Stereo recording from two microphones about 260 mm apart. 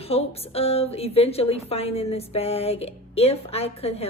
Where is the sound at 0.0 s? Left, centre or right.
Left.